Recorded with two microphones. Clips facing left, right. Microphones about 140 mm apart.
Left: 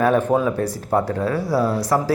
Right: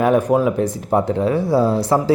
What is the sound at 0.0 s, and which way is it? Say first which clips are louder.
Speech: right 2 dB; 15° right (ahead or behind).